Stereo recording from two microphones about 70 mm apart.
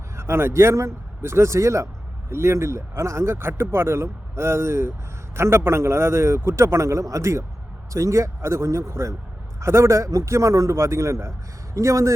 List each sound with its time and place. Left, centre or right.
0.2 s a man's voice: right